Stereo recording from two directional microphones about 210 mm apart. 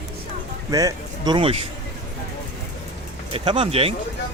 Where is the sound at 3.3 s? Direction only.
25° right (ahead or behind).